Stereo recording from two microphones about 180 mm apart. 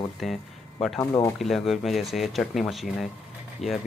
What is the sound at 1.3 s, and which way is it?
Speech, centre (ahead or behind).